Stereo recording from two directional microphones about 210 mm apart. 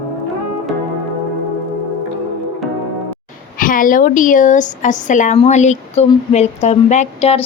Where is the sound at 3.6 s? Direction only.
40° left (ahead or behind).